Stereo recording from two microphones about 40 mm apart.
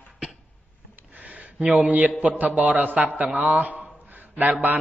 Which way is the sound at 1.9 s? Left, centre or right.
Right.